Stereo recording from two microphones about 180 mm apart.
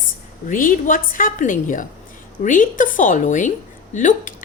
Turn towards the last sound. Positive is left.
turn(degrees=45)  # may be behind; listen again after turning